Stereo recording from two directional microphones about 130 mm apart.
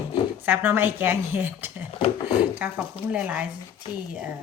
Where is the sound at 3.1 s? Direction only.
10° right (ahead or behind).